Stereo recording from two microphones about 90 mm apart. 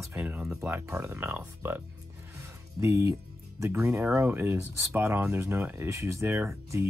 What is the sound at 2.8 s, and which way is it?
Speech, 35° right (ahead or behind).